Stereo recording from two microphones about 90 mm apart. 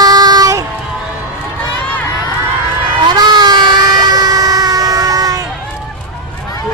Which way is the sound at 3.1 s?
50° right (ahead or behind).